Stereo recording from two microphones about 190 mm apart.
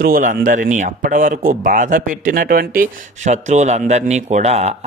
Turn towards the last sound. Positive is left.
turn(degrees=-35)  # may be behind; listen again after turning